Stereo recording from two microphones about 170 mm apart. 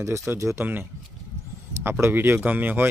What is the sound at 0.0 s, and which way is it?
Speech, 15° right (ahead or behind).